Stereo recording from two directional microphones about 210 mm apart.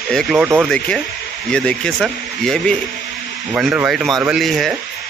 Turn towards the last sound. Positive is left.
turn(degrees=0)  # may be behind; listen again after turning